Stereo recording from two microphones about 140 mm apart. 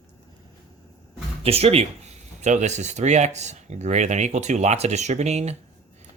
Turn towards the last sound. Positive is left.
turn(degrees=-50)  # may be behind; listen again after turning